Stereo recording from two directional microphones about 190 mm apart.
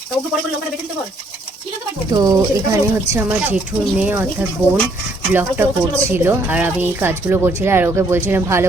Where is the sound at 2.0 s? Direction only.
20° right (ahead or behind).